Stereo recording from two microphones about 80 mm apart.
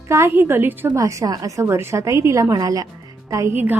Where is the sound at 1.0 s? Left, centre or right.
Right.